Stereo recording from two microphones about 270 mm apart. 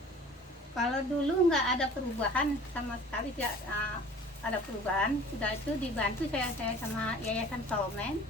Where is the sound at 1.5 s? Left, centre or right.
Centre.